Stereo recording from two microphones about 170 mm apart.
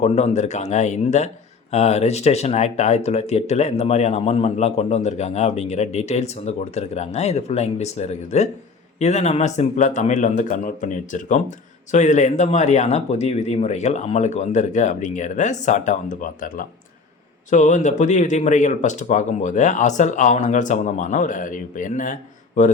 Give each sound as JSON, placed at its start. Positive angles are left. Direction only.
{"t": 0.0, "sound": "speech", "side_deg": 40}